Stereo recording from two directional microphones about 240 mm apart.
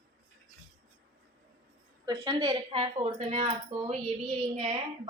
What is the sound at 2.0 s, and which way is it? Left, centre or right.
A woman's voice, centre.